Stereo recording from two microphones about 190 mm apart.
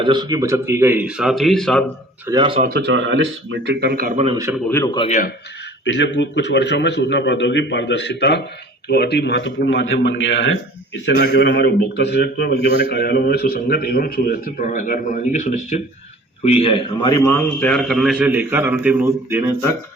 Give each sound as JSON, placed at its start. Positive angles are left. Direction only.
{"t": 0.0, "sound": "speech", "side_deg": -25}
{"t": 2.2, "sound": "speech", "side_deg": -25}
{"t": 2.6, "sound": "speech", "side_deg": -55}
{"t": 4.7, "sound": "speech", "side_deg": 15}
{"t": 4.9, "sound": "speech", "side_deg": 40}
{"t": 5.8, "sound": "a man's voice", "side_deg": 70}